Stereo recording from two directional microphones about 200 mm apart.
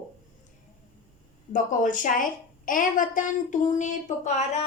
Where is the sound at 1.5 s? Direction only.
40° left (ahead or behind).